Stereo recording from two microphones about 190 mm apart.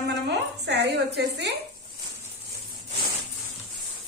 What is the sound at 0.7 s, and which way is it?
Speech, 60° right (ahead or behind).